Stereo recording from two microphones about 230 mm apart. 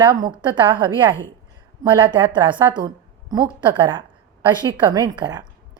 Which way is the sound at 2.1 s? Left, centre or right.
Right.